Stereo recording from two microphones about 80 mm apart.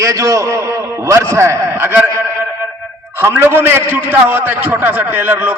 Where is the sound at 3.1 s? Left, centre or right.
Right.